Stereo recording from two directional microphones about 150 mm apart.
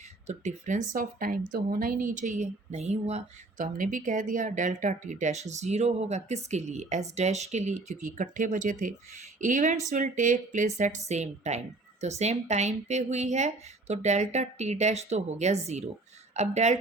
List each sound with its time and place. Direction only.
0.3 s a woman's voice: 55° right (ahead or behind)